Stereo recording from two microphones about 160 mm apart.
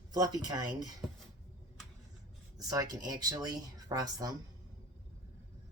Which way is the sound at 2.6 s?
25° right (ahead or behind).